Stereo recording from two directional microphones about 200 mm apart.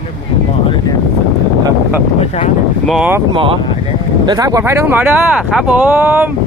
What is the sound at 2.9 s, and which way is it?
Speech, centre (ahead or behind).